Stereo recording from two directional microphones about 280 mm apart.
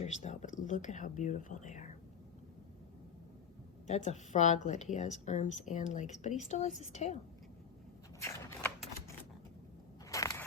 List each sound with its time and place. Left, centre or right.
0.0 s speech: left
3.8 s speech: left
8.2 s typewriter: centre
10.1 s a sound: centre